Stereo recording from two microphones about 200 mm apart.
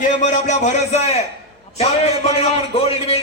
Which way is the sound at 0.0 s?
40° left (ahead or behind).